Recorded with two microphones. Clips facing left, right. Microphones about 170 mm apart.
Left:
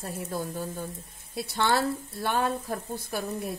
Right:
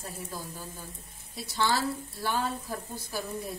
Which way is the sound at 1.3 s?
60° left (ahead or behind).